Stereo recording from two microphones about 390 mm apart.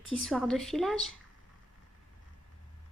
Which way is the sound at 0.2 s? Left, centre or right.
Centre.